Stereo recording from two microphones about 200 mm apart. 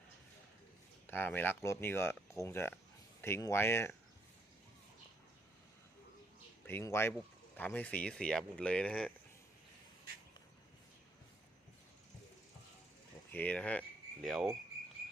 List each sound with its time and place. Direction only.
1.0 s speech: 10° left (ahead or behind)
6.7 s speech: 10° left (ahead or behind)
13.3 s speech: 5° left (ahead or behind)